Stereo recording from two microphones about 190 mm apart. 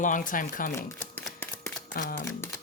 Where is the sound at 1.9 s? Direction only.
50° left (ahead or behind).